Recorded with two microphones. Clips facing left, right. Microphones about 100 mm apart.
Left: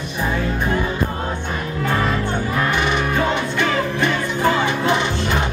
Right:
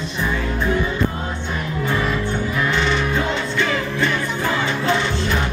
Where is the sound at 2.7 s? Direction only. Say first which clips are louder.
Left 1 dB; 15° left (ahead or behind).